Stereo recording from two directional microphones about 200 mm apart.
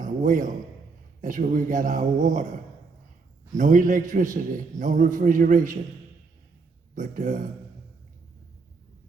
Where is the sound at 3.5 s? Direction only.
40° right (ahead or behind).